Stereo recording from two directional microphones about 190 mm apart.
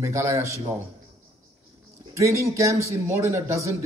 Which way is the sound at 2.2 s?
15° right (ahead or behind).